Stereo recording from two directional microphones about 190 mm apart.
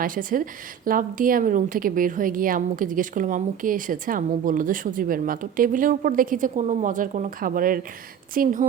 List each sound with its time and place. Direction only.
0.0 s a woman's voice: 45° right (ahead or behind)